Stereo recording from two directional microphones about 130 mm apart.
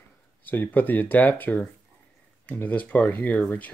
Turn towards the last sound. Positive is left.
turn(degrees=10)  # may be behind; listen again after turning